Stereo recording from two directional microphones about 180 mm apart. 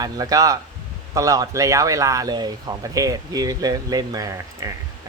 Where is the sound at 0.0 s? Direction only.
20° right (ahead or behind).